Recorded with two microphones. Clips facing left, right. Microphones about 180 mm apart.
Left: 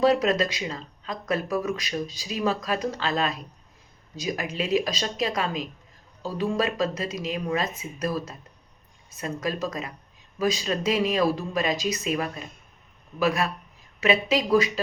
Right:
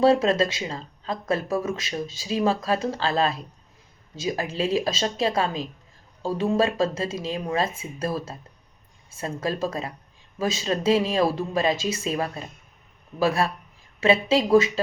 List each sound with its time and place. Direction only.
0.0 s speech: 25° right (ahead or behind)